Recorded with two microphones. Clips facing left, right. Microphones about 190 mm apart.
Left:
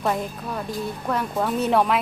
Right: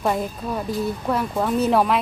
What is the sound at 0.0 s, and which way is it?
Speech, 5° right (ahead or behind).